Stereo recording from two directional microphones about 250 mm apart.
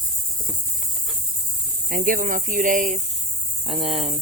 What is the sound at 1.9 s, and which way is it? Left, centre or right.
Speech, right.